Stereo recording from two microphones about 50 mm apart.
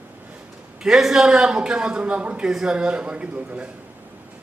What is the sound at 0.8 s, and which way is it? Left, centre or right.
A man's voice, centre.